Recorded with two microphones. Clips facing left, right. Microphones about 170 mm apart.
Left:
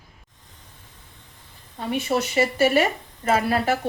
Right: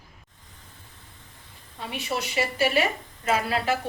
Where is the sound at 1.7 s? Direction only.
45° left (ahead or behind).